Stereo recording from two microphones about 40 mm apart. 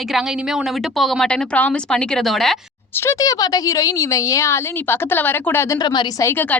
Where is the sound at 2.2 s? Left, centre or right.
Centre.